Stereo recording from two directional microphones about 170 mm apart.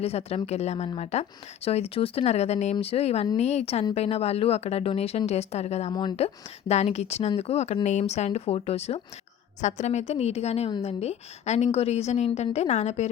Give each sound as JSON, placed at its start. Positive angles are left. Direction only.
{"t": 0.0, "sound": "a woman's voice", "side_deg": 35}
{"t": 5.9, "sound": "speech", "side_deg": 25}
{"t": 6.1, "sound": "a woman's voice", "side_deg": 40}